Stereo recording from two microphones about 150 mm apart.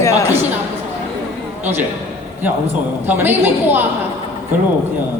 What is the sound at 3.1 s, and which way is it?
Speech, 15° right (ahead or behind).